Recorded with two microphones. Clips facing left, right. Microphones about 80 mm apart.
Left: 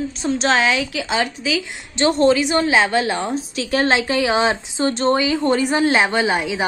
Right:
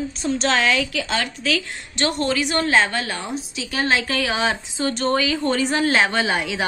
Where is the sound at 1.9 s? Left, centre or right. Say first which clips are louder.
Left 7 dB; left.